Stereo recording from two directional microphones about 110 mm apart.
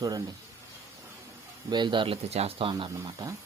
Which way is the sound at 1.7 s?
45° right (ahead or behind).